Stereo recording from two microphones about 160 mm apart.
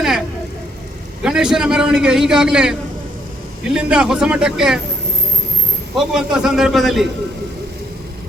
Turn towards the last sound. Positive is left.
turn(degrees=0)  # may be behind; listen again after turning